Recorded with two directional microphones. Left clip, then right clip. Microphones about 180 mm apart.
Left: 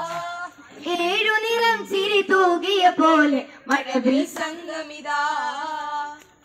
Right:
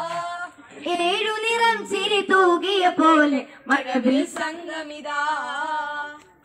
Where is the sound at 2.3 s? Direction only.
30° right (ahead or behind).